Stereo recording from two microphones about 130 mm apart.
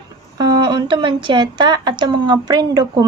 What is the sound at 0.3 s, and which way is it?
A woman's voice, 35° right (ahead or behind).